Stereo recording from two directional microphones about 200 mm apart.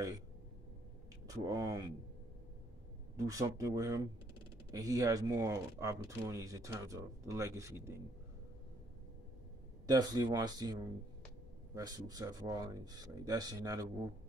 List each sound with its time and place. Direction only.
1.3 s speech: 15° right (ahead or behind)
3.2 s speech: 15° right (ahead or behind)
9.8 s speech: 20° right (ahead or behind)